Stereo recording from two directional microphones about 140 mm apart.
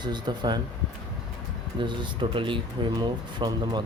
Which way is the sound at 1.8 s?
35° right (ahead or behind).